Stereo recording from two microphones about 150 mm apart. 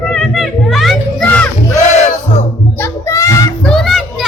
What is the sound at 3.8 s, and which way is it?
Children playing, centre (ahead or behind).